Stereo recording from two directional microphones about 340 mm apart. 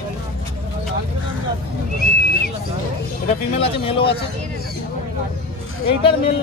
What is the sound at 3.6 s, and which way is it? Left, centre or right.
Speech, centre.